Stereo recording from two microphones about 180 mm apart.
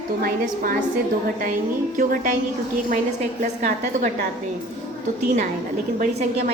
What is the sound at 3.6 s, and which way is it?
Speech, 45° right (ahead or behind).